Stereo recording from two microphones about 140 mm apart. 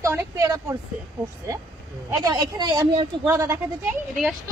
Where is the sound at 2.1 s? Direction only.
30° right (ahead or behind).